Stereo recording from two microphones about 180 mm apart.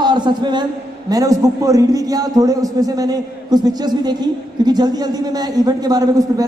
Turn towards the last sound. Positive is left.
turn(degrees=-20)  # may be behind; listen again after turning